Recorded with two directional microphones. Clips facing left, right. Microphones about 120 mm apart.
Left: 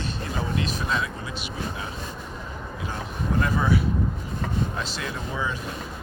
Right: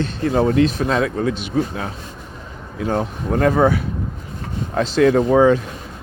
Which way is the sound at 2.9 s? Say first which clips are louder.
Right 10 dB; 60° right (ahead or behind).